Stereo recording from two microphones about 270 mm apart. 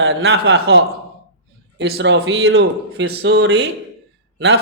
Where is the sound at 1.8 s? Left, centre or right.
Right.